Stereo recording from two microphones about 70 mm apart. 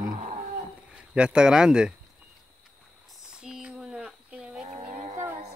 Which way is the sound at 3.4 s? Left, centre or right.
Centre.